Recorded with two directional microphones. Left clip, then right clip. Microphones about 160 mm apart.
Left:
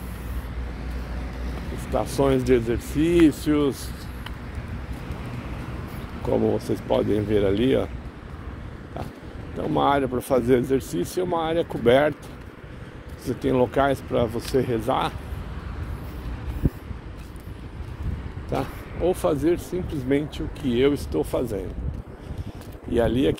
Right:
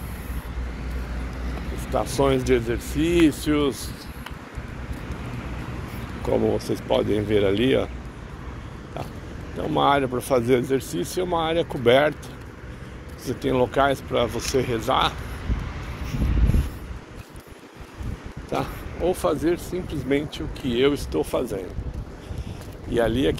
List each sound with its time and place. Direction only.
1.9 s speech: 45° left (ahead or behind)
6.3 s speech: 35° left (ahead or behind)
7.2 s speech: 25° left (ahead or behind)
9.6 s speech: 40° left (ahead or behind)
13.2 s speech: 50° left (ahead or behind)
18.5 s speech: 45° left (ahead or behind)
22.9 s speech: 45° left (ahead or behind)